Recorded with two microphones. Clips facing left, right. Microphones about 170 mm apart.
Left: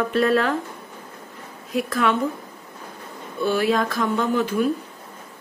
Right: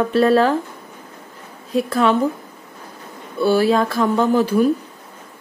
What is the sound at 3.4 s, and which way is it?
Speech, 35° right (ahead or behind).